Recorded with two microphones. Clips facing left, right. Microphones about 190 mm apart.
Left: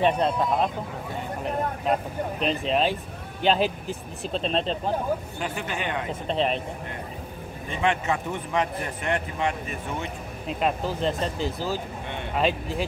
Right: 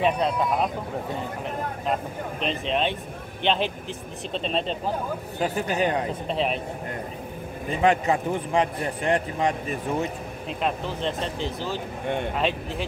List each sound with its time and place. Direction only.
0.0 s speech: centre (ahead or behind)
2.4 s speech: centre (ahead or behind)
5.4 s speech: 40° right (ahead or behind)
6.2 s speech: centre (ahead or behind)
7.7 s speech: 35° right (ahead or behind)
10.6 s speech: centre (ahead or behind)